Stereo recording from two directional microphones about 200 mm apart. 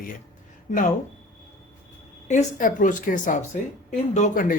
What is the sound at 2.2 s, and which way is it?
A woman's voice, 40° left (ahead or behind).